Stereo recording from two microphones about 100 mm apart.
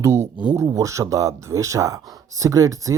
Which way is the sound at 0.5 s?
35° right (ahead or behind).